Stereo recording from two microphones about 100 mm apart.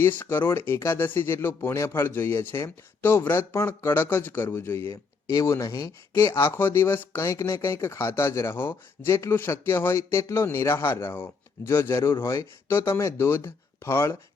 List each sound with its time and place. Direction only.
0.0 s speech: 20° left (ahead or behind)